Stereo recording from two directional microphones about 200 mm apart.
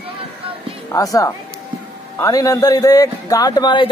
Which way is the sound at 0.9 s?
15° left (ahead or behind).